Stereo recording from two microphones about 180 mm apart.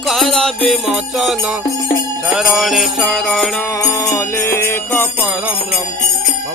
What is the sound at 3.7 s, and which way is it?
Jingle bell, 20° left (ahead or behind).